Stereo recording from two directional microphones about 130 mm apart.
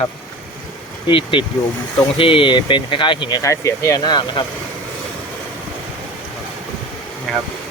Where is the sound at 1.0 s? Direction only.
40° left (ahead or behind).